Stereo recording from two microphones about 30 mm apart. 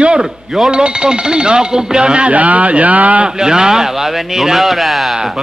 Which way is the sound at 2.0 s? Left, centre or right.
Right.